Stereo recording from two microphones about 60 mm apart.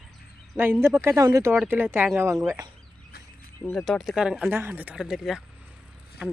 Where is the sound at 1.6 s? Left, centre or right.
Right.